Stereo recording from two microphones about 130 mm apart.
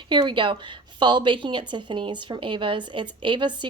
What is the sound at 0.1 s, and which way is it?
A woman's voice, 40° right (ahead or behind).